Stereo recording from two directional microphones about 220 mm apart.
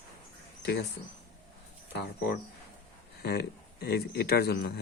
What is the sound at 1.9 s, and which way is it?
Speech, 50° left (ahead or behind).